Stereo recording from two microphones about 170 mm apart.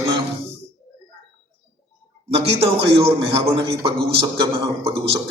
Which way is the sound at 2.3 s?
35° right (ahead or behind).